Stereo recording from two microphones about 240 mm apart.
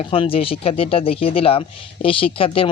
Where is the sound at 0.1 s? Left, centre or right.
Left.